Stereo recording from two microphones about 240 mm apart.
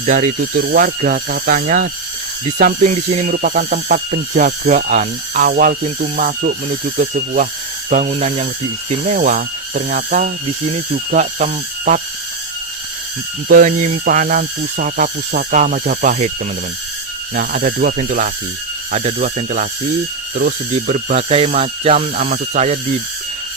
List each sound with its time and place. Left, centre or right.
0.0 s speech: right
13.5 s speech: right
17.3 s speech: right